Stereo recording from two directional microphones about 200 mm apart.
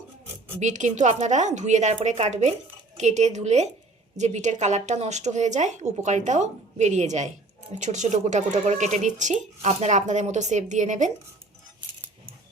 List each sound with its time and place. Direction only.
0.6 s speech: 35° right (ahead or behind)